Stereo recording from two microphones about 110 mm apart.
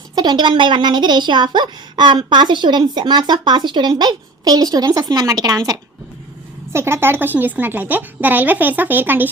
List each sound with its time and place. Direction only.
0.2 s speech: 40° right (ahead or behind); by 9.3 s 15° right (ahead or behind)